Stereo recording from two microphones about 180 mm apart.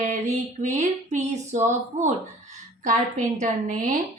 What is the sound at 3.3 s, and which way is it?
Speech, 45° right (ahead or behind).